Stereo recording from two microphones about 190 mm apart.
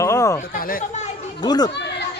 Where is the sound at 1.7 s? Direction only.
65° left (ahead or behind).